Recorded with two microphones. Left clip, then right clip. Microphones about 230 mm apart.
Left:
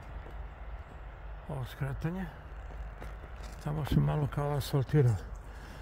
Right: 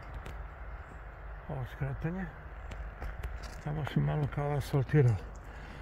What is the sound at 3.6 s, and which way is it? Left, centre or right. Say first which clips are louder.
Speech: left 2 dB; centre.